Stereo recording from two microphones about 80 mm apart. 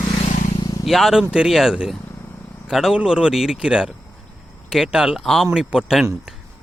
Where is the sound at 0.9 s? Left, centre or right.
Centre.